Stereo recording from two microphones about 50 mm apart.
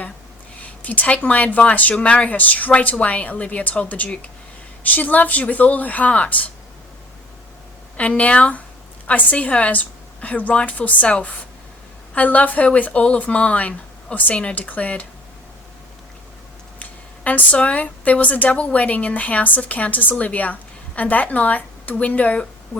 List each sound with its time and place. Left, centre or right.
0.6 s speech: left
7.9 s a woman's voice: left
16.8 s speech: left